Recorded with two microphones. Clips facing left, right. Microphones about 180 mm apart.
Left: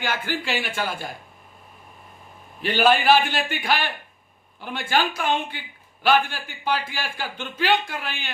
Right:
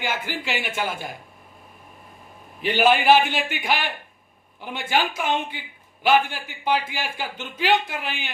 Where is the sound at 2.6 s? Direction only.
15° right (ahead or behind).